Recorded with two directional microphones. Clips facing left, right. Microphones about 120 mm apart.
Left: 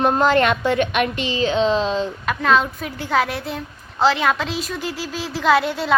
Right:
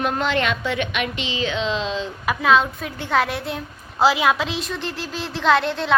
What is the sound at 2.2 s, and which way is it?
A woman's voice, 5° right (ahead or behind).